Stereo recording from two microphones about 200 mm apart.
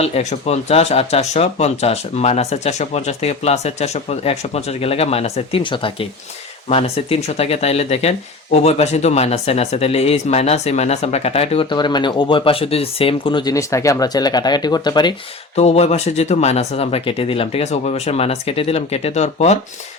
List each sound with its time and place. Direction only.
0.0 s speech: 35° left (ahead or behind)
15.5 s speech: 30° left (ahead or behind)